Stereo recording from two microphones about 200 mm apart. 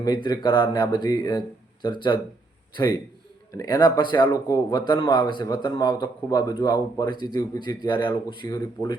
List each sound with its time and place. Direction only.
0.0 s a man's voice: 20° left (ahead or behind)